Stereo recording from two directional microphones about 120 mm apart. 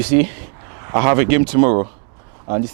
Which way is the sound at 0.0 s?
20° right (ahead or behind).